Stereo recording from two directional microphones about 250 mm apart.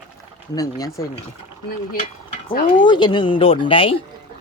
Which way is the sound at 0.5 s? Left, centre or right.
Centre.